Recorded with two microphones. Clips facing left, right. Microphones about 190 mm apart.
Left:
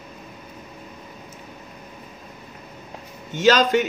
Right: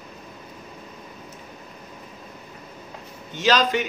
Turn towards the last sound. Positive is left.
turn(degrees=45)  # may be behind; listen again after turning